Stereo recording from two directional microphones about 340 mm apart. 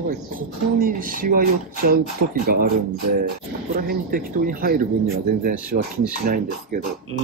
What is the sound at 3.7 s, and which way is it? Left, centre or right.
Speech, right.